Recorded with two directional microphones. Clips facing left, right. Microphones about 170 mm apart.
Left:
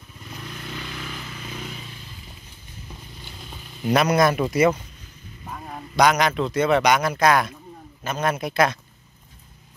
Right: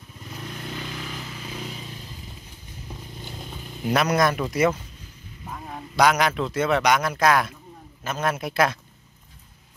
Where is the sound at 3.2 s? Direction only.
45° right (ahead or behind).